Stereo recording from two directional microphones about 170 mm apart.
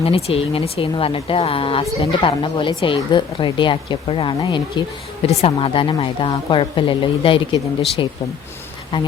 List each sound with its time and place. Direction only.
0.0 s speech: 35° left (ahead or behind)